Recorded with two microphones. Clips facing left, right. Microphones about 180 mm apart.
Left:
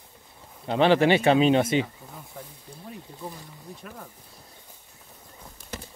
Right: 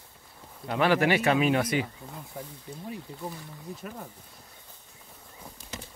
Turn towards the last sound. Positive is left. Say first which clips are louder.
# right 2 dB
turn(degrees=-5)  # may be behind; listen again after turning